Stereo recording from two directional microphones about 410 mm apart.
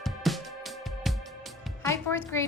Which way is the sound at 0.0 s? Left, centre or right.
Centre.